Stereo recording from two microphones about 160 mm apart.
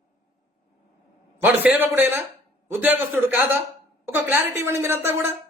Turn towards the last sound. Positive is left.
turn(degrees=-15)  # may be behind; listen again after turning